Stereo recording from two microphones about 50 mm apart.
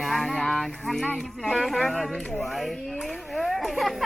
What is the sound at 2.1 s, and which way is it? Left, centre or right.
Speech, centre.